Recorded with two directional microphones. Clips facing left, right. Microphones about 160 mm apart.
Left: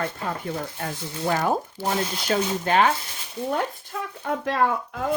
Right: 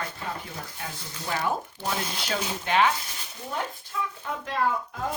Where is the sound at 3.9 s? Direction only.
55° left (ahead or behind).